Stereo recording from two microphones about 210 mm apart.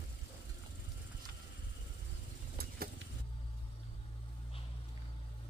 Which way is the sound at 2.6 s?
45° right (ahead or behind).